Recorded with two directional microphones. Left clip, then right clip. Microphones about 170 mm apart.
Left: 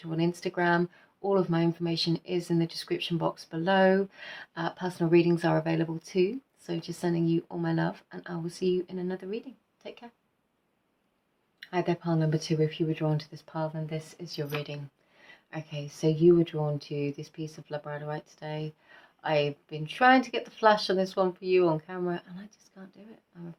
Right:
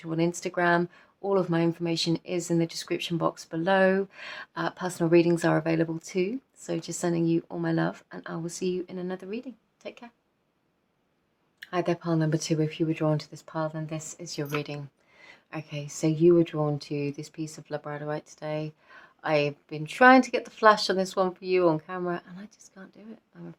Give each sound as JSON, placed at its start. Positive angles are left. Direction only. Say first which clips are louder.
{"t": 0.0, "sound": "speech", "louder": "right 2 dB", "side_deg": -40}
{"t": 11.6, "sound": "speech", "louder": "right 2 dB", "side_deg": -50}